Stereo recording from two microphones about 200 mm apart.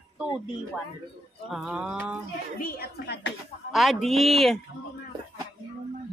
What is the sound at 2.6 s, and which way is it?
Speech, 50° left (ahead or behind).